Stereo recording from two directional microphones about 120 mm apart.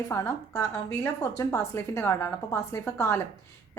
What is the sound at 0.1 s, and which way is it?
A woman's voice, 25° left (ahead or behind).